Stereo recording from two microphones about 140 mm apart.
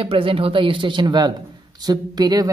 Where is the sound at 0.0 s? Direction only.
40° right (ahead or behind).